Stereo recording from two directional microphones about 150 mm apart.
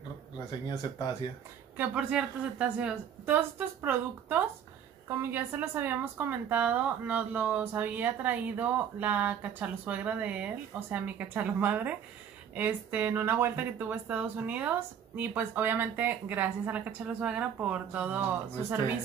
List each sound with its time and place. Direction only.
0.5 s speech: 25° left (ahead or behind)
1.8 s a woman's voice: 10° right (ahead or behind)